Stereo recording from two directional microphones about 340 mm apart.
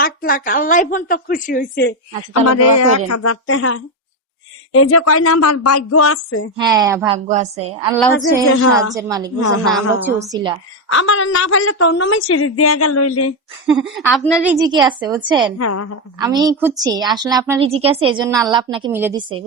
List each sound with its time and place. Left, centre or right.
0.0 s a woman's voice: left
2.3 s a woman's voice: left
6.6 s a woman's voice: centre
7.9 s a woman's voice: centre
8.4 s a woman's voice: left
8.9 s a woman's voice: centre
10.9 s a woman's voice: left
13.7 s a woman's voice: centre
14.4 s a woman's voice: centre
15.5 s a woman's voice: left
16.1 s a woman's voice: centre